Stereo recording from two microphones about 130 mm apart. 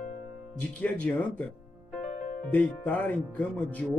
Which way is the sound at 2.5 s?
10° left (ahead or behind).